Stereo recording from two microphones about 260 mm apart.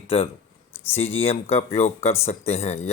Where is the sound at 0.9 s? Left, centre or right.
Left.